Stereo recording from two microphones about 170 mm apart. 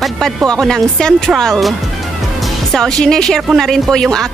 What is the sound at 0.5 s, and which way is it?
A woman's voice, centre (ahead or behind).